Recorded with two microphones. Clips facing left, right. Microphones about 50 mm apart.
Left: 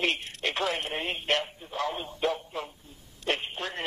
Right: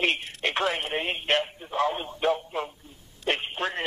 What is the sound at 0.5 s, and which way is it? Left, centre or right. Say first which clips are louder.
Radio: right 4 dB; centre.